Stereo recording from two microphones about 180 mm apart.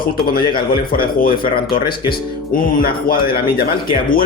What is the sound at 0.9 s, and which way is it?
Speech, 55° left (ahead or behind).